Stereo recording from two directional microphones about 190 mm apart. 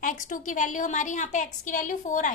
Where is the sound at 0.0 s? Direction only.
40° left (ahead or behind).